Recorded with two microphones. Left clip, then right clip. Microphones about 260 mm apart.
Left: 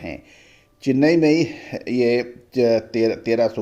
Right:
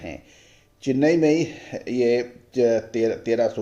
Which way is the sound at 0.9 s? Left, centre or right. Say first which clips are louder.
Left 3 dB; left.